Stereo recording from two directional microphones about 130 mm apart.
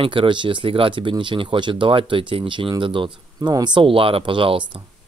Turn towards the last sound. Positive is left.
turn(degrees=-40)  # may be behind; listen again after turning